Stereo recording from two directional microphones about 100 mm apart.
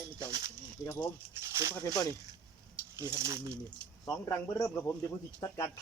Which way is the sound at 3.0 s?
30° right (ahead or behind).